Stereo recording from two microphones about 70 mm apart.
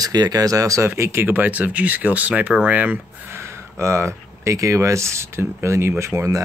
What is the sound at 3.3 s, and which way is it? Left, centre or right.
Speech, right.